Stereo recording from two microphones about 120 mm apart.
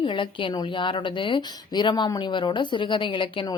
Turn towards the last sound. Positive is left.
turn(degrees=45)  # may be behind; listen again after turning